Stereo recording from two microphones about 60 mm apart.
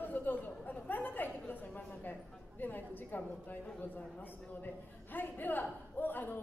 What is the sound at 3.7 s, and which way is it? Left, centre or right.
A man's voice, left.